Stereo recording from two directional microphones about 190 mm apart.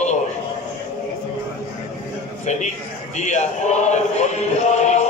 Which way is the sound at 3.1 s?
40° left (ahead or behind).